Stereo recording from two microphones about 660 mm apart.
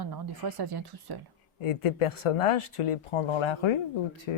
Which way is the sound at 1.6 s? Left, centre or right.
Left.